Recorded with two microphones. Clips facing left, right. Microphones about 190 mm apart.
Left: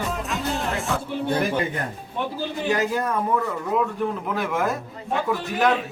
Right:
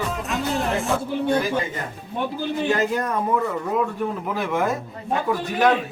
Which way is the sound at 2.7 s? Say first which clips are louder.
Even; 10° left (ahead or behind).